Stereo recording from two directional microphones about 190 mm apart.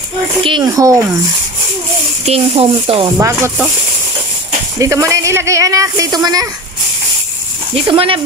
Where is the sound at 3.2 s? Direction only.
15° right (ahead or behind).